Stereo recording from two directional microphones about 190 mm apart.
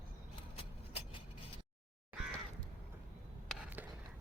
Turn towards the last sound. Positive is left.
turn(degrees=-5)  # may be behind; listen again after turning